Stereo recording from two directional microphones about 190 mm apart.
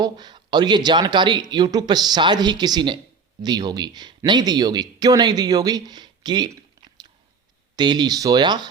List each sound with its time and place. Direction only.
0.0 s speech: 20° right (ahead or behind)